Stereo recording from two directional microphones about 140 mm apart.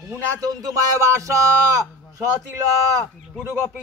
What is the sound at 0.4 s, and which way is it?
Speech, 25° right (ahead or behind).